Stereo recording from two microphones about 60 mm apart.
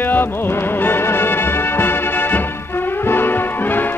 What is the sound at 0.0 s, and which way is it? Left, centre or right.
Music, left.